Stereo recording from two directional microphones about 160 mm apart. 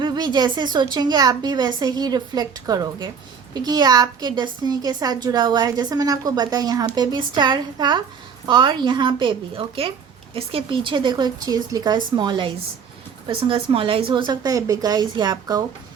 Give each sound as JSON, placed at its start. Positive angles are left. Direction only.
{"t": 0.0, "sound": "a woman's voice", "side_deg": -25}